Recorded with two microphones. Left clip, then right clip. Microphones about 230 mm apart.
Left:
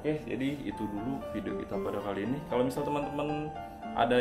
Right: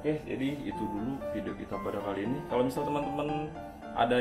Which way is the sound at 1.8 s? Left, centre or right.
Left.